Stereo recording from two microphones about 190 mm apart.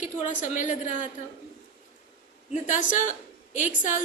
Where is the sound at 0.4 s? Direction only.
40° left (ahead or behind).